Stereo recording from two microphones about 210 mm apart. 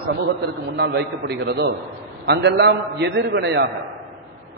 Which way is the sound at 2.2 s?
55° right (ahead or behind).